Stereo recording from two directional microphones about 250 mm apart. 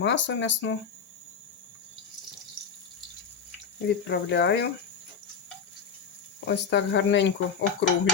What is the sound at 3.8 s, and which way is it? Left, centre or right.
Speech, left.